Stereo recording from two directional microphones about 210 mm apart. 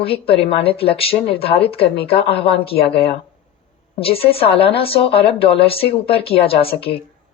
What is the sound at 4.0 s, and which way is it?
Speech, 25° left (ahead or behind).